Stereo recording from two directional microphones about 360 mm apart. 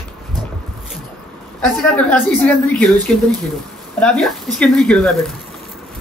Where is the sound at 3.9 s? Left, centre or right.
Centre.